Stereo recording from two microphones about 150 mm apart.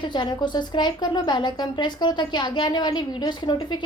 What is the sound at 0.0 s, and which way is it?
A woman's voice, 30° left (ahead or behind).